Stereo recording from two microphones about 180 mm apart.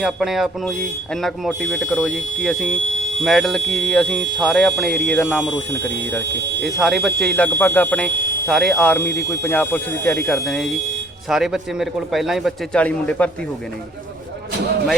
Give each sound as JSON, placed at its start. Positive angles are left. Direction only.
{"t": 0.0, "sound": "speech", "side_deg": 0}
{"t": 6.2, "sound": "speech", "side_deg": -75}
{"t": 6.7, "sound": "speech", "side_deg": 0}